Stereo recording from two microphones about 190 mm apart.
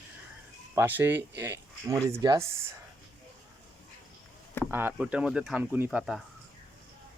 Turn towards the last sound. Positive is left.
turn(degrees=-5)  # may be behind; listen again after turning